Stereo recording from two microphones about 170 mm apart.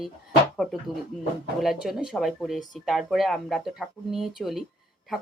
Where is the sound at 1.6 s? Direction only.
Centre (ahead or behind).